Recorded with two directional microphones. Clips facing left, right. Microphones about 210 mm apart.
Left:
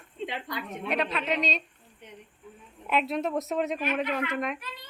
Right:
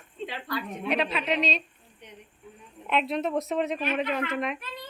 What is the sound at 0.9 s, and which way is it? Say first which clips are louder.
Speech: right 2 dB; centre (ahead or behind).